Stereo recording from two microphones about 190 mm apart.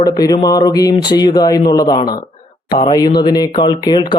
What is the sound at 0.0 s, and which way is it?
Speech, 20° left (ahead or behind).